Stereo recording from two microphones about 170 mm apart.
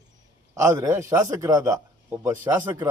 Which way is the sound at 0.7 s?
15° right (ahead or behind).